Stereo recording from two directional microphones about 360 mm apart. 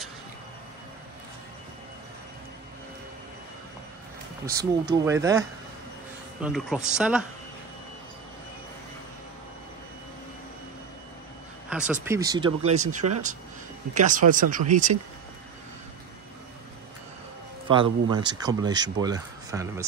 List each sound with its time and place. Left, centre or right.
4.5 s speech: centre
11.7 s speech: centre
12.8 s speech: right
13.9 s speech: right
17.6 s speech: centre